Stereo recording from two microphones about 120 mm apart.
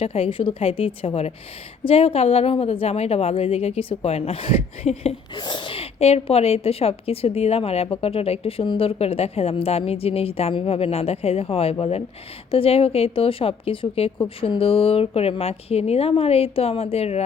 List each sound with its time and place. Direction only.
0.0 s a woman's voice: 55° left (ahead or behind)
5.3 s a woman's voice: 40° left (ahead or behind); by 17.2 s 60° left (ahead or behind)